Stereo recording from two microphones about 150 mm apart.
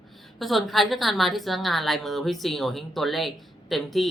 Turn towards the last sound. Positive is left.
turn(degrees=0)  # may be behind; listen again after turning